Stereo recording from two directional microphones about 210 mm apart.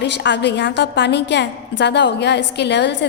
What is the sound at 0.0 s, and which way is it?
A woman's voice, 55° left (ahead or behind).